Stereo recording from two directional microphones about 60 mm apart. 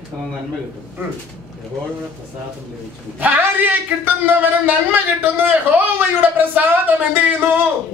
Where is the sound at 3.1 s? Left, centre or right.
Right.